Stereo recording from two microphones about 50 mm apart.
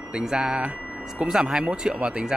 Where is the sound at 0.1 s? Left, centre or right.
Centre.